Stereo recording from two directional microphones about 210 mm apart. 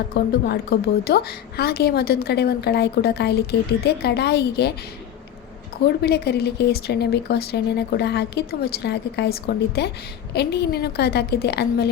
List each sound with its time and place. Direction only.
0.1 s speech: 50° left (ahead or behind)
6.0 s speech: 50° left (ahead or behind)